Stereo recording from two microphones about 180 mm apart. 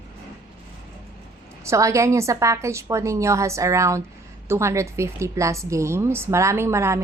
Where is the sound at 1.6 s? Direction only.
15° right (ahead or behind).